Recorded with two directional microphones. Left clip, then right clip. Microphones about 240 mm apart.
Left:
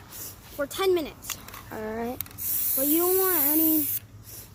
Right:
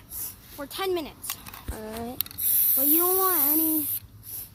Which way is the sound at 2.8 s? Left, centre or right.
Centre.